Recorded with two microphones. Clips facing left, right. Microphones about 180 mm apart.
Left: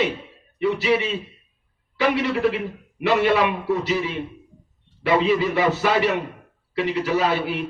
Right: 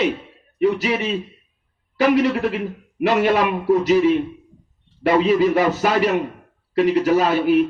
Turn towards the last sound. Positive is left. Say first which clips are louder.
# right 6 dB
turn(degrees=-45)  # may be behind; listen again after turning